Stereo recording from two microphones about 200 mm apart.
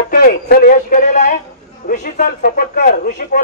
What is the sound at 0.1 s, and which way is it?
A man's voice, 45° left (ahead or behind).